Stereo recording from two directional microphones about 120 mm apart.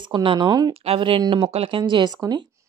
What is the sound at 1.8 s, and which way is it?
Speech, 35° right (ahead or behind).